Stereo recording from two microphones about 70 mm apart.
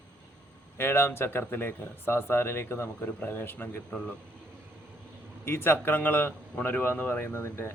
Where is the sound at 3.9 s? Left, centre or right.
Centre.